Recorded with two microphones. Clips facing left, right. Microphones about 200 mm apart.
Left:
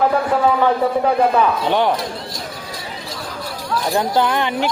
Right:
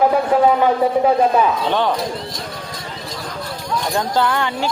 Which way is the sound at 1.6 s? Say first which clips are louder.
Left 1 dB; 15° left (ahead or behind).